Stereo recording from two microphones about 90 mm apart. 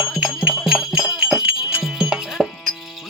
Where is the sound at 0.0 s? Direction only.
5° right (ahead or behind).